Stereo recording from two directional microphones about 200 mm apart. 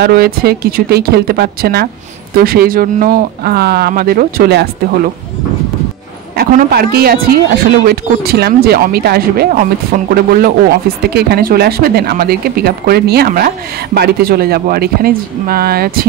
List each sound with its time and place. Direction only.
0.0 s speech: 50° right (ahead or behind)
6.3 s speech: 50° right (ahead or behind)